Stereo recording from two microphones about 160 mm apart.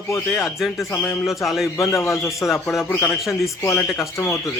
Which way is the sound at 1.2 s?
Centre (ahead or behind).